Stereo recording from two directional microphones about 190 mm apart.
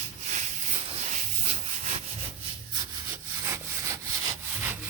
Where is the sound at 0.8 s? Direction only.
35° right (ahead or behind).